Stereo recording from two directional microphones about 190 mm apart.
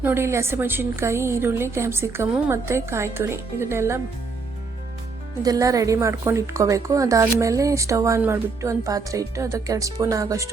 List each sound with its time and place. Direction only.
0.0 s a woman's voice: 10° right (ahead or behind)
5.4 s a woman's voice: 20° right (ahead or behind)